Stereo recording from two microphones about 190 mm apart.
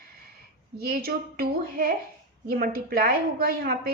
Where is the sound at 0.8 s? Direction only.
55° right (ahead or behind).